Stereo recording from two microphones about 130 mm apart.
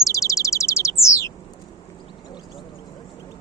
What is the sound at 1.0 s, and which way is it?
Bird, 25° left (ahead or behind).